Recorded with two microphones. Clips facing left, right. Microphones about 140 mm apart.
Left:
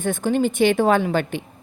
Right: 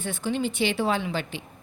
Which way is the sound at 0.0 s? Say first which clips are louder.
Left 7 dB; 50° left (ahead or behind).